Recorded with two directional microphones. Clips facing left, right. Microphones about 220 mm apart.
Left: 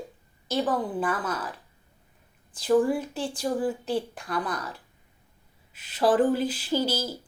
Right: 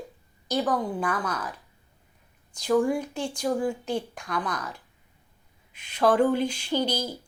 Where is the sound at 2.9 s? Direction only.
5° left (ahead or behind).